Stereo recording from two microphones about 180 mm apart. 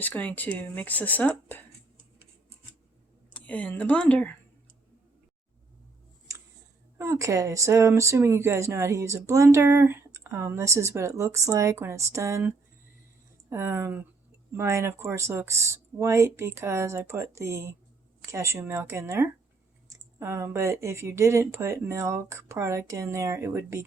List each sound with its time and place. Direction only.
0.0 s speech: 10° left (ahead or behind)
3.3 s speech: 5° left (ahead or behind)
7.0 s speech: 15° right (ahead or behind)